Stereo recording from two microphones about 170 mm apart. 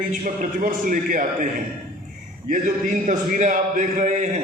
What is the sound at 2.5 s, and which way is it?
A man's voice, 50° right (ahead or behind).